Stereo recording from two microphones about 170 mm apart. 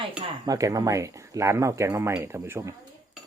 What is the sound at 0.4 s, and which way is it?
Speech, 20° right (ahead or behind).